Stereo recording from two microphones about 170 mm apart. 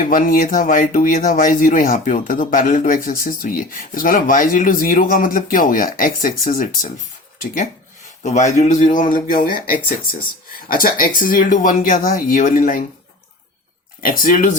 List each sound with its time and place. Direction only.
0.0 s speech: 55° left (ahead or behind)
8.2 s speech: 45° left (ahead or behind)
14.0 s speech: 55° left (ahead or behind)